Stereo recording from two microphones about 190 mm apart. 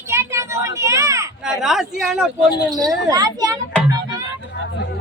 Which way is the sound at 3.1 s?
20° right (ahead or behind).